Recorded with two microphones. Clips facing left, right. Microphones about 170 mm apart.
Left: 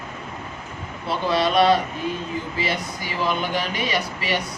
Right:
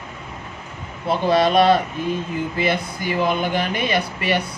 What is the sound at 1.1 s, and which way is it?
Speech, 50° right (ahead or behind).